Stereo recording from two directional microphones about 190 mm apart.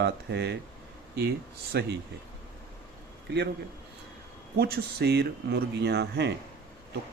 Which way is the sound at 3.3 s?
60° right (ahead or behind).